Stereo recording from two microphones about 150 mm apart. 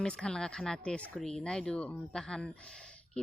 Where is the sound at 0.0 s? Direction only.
5° left (ahead or behind).